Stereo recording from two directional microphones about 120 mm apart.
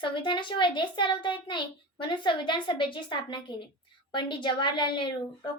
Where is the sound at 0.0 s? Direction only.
40° left (ahead or behind).